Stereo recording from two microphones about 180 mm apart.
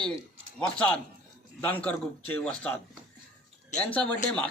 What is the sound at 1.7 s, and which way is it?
A man's voice, 10° left (ahead or behind).